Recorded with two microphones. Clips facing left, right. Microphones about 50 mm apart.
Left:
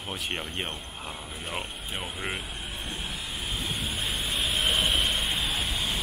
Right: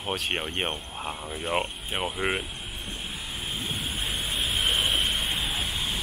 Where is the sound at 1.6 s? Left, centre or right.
Right.